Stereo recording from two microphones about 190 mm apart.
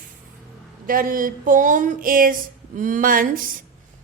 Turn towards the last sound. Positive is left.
turn(degrees=-45)  # may be behind; listen again after turning